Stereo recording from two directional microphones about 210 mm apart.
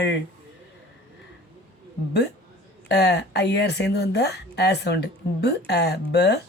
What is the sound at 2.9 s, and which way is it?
Speech, 55° left (ahead or behind).